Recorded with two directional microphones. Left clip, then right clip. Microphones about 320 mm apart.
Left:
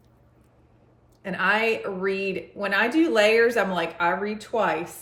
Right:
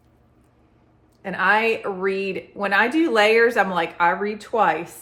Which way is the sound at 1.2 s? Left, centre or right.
Centre.